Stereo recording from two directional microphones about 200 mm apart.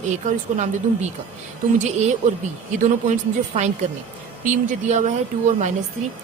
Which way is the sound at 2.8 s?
35° right (ahead or behind).